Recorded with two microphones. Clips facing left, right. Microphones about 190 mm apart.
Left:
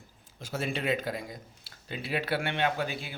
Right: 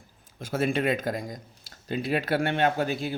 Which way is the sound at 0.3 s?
55° right (ahead or behind).